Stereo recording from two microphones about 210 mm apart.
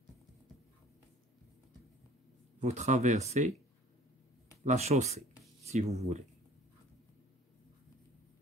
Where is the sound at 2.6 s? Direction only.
35° right (ahead or behind).